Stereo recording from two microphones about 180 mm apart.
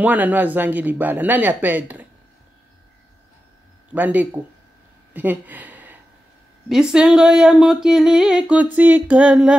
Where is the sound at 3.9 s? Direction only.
10° right (ahead or behind).